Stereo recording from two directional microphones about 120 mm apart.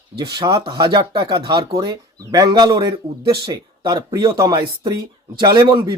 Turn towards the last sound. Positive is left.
turn(degrees=-35)  # may be behind; listen again after turning